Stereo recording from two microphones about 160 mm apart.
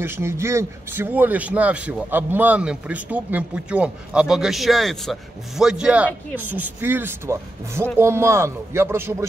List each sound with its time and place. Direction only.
0.0 s speech: 15° right (ahead or behind)